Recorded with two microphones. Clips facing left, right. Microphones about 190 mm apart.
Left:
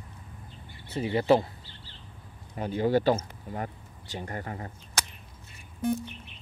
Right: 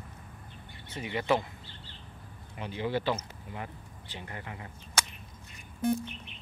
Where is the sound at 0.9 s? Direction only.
35° left (ahead or behind).